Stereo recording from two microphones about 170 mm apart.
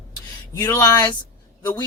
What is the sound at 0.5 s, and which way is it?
Speech, 15° left (ahead or behind).